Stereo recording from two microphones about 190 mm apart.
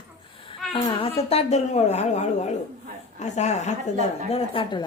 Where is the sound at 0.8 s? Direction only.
25° left (ahead or behind).